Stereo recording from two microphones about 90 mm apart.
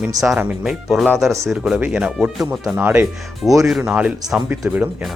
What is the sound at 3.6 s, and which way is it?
Speech, 5° right (ahead or behind).